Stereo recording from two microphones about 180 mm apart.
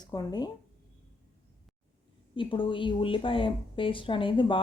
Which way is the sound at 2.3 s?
30° left (ahead or behind).